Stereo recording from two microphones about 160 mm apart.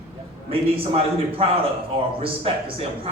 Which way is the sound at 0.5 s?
35° right (ahead or behind).